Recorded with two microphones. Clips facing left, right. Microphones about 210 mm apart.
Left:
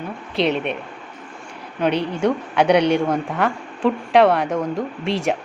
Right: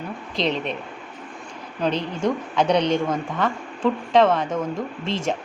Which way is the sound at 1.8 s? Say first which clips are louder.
Left 4 dB; 10° left (ahead or behind).